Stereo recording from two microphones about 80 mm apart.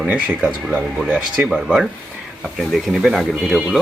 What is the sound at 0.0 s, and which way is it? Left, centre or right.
Speech, centre.